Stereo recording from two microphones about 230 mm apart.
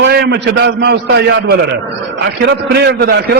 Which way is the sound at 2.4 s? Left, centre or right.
Right.